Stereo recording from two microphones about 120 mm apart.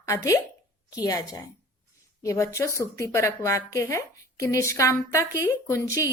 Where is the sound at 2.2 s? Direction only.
25° left (ahead or behind).